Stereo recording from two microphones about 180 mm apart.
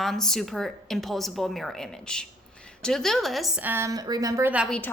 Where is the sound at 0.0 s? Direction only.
Centre (ahead or behind).